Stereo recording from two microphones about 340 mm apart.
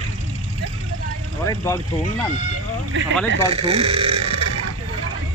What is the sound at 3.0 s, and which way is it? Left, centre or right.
Speech, right.